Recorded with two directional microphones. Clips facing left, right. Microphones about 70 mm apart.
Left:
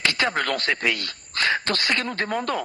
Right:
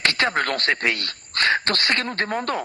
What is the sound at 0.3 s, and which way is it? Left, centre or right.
A man's voice, right.